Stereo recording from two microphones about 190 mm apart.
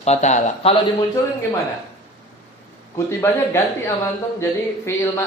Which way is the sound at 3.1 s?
15° left (ahead or behind).